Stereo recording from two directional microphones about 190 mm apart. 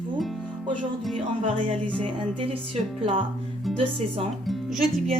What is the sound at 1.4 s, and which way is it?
Speech, 25° right (ahead or behind).